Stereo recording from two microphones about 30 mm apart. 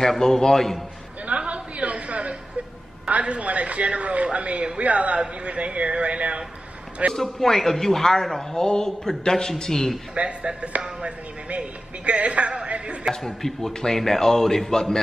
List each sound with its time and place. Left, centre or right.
0.2 s speech: centre
1.2 s a sound: right
7.2 s speech: centre
10.1 s a man's voice: right
13.1 s speech: centre